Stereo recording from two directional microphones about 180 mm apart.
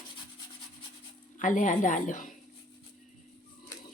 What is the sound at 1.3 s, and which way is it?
Speech, 45° left (ahead or behind).